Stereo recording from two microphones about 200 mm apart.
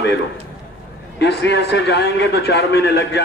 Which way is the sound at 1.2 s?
60° left (ahead or behind).